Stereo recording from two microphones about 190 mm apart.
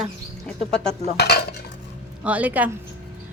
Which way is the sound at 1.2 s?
60° left (ahead or behind).